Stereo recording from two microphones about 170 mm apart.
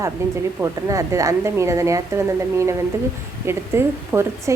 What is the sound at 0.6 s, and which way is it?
A woman's voice, 20° right (ahead or behind).